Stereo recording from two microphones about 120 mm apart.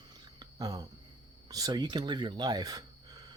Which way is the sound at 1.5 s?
35° right (ahead or behind).